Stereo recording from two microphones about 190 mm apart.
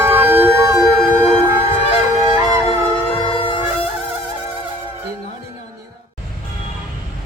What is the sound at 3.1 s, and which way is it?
Music, 30° left (ahead or behind).